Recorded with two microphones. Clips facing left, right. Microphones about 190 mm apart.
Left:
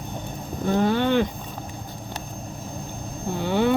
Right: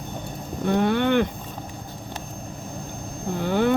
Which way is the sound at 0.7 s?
60° right (ahead or behind).